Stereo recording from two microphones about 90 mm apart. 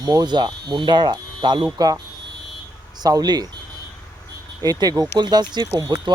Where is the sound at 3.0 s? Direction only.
45° right (ahead or behind).